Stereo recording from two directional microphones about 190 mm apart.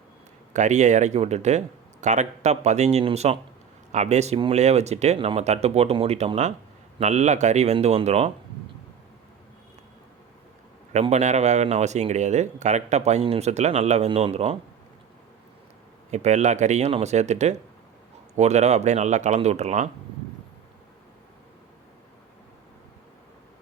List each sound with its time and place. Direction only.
0.5 s speech: 40° right (ahead or behind)
10.9 s speech: 35° right (ahead or behind)
16.1 s speech: 35° right (ahead or behind)